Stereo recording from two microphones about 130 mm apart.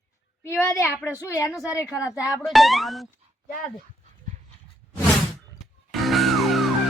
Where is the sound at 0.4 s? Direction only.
20° left (ahead or behind).